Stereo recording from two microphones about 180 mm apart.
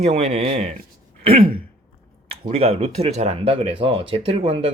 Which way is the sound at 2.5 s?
35° right (ahead or behind).